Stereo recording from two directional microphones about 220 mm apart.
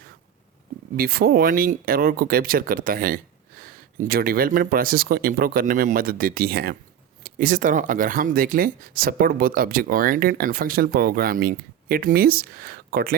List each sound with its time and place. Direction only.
0.9 s speech: 40° right (ahead or behind)